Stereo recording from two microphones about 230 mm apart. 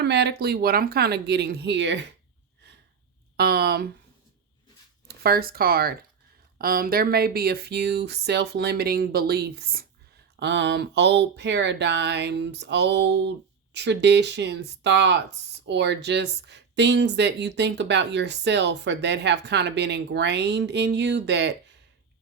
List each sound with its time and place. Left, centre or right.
0.0 s speech: right
3.3 s speech: right
5.0 s speech: right